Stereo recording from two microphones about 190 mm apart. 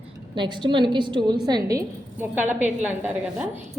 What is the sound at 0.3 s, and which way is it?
A woman's voice, 25° right (ahead or behind).